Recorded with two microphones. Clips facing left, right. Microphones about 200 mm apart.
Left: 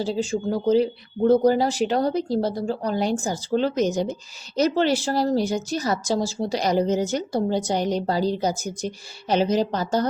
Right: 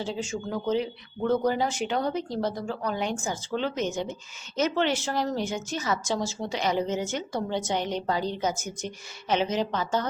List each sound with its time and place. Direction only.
0.0 s a woman's voice: 35° left (ahead or behind)